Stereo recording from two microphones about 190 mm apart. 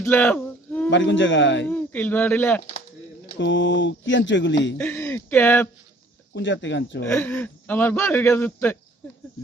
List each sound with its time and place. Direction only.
0.0 s a sound: 10° left (ahead or behind)
0.9 s speech: 75° left (ahead or behind)
1.6 s speech: 10° left (ahead or behind)
3.3 s speech: 70° left (ahead or behind)
4.8 s speech: 15° left (ahead or behind)
6.3 s speech: 75° left (ahead or behind)
7.1 s speech: 10° left (ahead or behind)